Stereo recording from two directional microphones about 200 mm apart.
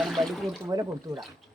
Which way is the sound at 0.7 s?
15° right (ahead or behind).